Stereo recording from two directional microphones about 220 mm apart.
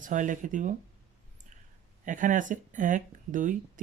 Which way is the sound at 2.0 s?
35° right (ahead or behind).